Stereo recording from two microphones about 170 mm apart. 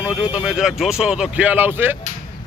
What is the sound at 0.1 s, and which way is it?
Speech, 5° right (ahead or behind).